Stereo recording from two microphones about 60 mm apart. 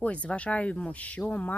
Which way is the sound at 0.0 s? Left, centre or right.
Left.